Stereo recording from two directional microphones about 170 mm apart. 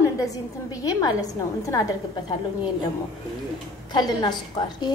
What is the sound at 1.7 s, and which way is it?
Speech, 20° left (ahead or behind).